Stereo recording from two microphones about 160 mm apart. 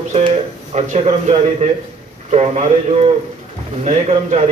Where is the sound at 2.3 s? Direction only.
40° right (ahead or behind).